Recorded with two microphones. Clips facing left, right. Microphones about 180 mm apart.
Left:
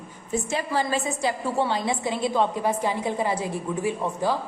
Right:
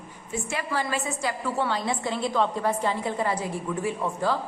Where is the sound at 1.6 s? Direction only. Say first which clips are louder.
Left 2 dB; 20° left (ahead or behind).